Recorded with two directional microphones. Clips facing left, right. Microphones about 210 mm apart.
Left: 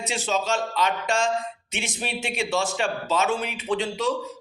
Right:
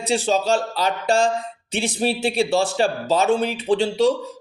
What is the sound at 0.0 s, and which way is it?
Speech, 35° right (ahead or behind).